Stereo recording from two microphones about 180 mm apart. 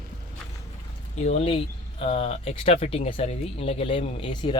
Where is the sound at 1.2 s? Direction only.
35° left (ahead or behind).